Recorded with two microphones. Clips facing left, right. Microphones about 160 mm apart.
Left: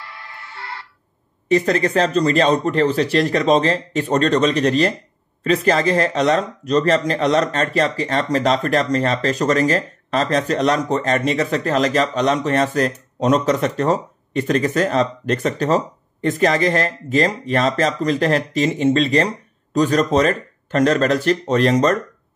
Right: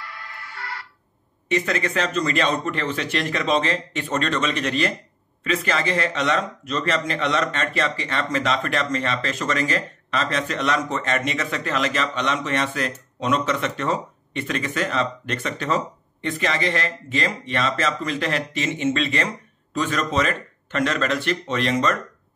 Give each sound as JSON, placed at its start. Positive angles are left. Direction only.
{"t": 0.0, "sound": "music", "side_deg": 25}
{"t": 1.5, "sound": "speech", "side_deg": 35}